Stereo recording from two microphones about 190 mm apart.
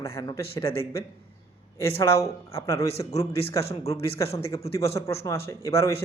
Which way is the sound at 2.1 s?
15° left (ahead or behind).